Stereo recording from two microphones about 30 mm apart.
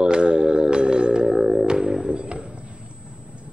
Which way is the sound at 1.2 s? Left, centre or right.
Centre.